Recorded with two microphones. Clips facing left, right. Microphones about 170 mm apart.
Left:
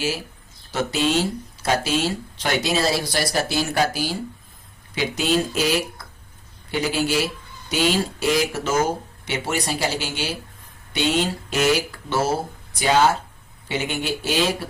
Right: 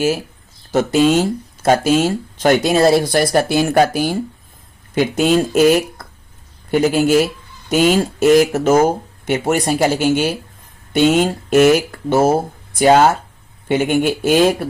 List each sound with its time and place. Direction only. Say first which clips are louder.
0.7 s speech: right 8 dB; 50° right (ahead or behind)